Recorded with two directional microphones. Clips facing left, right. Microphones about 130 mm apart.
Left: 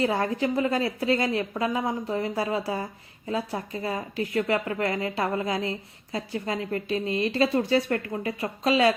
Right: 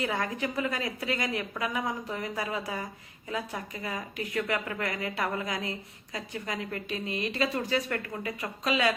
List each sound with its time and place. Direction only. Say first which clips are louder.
0.0 s a woman's voice: left 6 dB; 35° left (ahead or behind)